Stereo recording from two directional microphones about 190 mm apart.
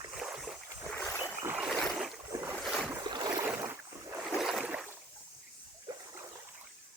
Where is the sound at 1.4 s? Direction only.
5° right (ahead or behind).